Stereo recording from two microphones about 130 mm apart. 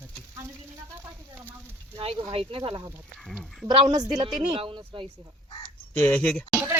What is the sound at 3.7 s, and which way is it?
A woman's voice, 35° right (ahead or behind).